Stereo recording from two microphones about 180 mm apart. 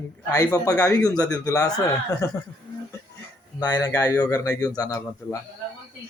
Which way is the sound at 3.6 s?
20° left (ahead or behind).